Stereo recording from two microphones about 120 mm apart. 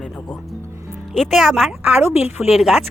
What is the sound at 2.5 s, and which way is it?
Speech, centre (ahead or behind).